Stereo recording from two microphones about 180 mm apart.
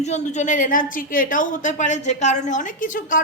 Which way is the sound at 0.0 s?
40° left (ahead or behind).